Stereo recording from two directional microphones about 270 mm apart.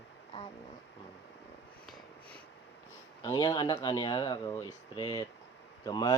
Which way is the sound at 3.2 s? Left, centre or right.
Centre.